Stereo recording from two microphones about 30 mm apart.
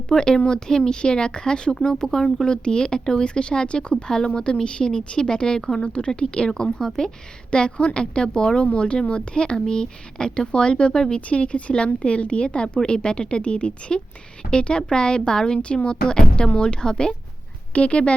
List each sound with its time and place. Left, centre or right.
0.1 s a woman's voice: left
5.8 s a woman's voice: left
6.7 s speech: centre
7.5 s a woman's voice: left
11.3 s a woman's voice: left
12.6 s a woman's voice: left
15.5 s a woman's voice: left
17.7 s a woman's voice: left